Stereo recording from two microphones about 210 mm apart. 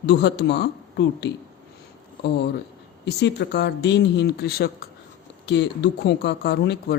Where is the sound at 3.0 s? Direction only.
55° left (ahead or behind).